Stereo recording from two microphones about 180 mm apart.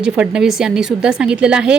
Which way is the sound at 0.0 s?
5° right (ahead or behind).